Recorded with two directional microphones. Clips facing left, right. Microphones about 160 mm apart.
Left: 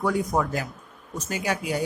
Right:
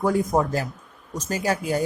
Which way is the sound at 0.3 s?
35° right (ahead or behind).